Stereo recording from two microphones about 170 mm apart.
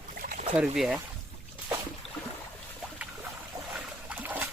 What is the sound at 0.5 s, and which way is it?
Speech, 5° right (ahead or behind).